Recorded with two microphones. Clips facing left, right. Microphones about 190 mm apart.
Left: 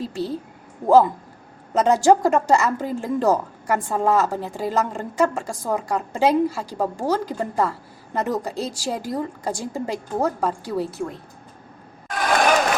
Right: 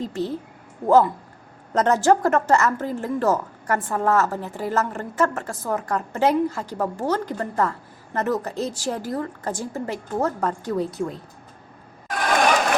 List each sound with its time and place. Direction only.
0.0 s a woman's voice: 10° left (ahead or behind)